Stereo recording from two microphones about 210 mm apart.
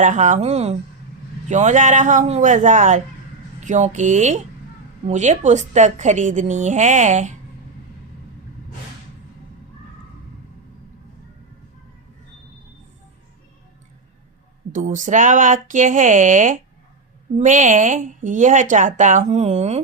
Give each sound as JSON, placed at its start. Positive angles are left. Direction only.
{"t": 0.0, "sound": "a woman's voice", "side_deg": -35}
{"t": 14.7, "sound": "a woman's voice", "side_deg": -40}